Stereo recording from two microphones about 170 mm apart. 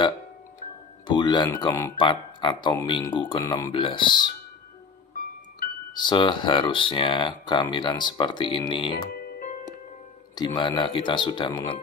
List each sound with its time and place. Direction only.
1.0 s speech: 25° left (ahead or behind)
5.9 s speech: 25° left (ahead or behind)
10.3 s speech: 25° left (ahead or behind)